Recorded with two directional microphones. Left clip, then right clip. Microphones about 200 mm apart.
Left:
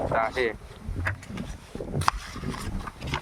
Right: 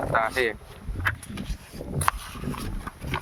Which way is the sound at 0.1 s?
20° right (ahead or behind).